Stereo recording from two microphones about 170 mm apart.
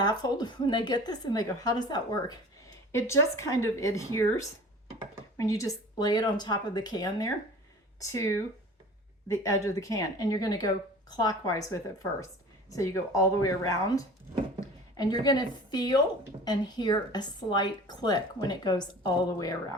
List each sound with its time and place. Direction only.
0.0 s a woman's voice: 25° left (ahead or behind)
15.2 s a woman's voice: 25° left (ahead or behind)